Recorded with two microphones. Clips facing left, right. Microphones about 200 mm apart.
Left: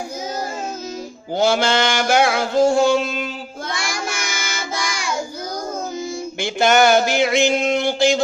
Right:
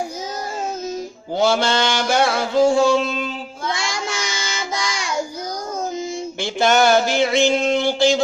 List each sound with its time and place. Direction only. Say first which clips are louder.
1.4 s mantra: left 1 dB; centre (ahead or behind)
3.8 s child singing: right 1 dB; 20° right (ahead or behind)
6.4 s mantra: left 1 dB; centre (ahead or behind)